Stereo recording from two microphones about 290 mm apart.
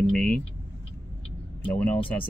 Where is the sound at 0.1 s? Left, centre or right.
Centre.